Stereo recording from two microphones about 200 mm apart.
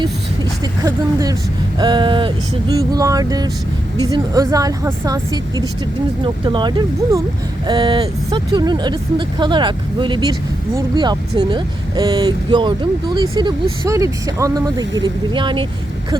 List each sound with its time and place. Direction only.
0.6 s speech: 20° right (ahead or behind)